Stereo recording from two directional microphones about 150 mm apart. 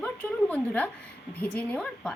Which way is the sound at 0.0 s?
10° left (ahead or behind).